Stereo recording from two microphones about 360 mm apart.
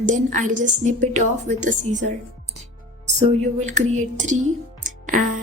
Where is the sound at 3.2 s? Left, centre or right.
Centre.